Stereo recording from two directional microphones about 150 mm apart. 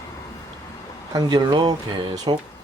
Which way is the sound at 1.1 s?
25° right (ahead or behind).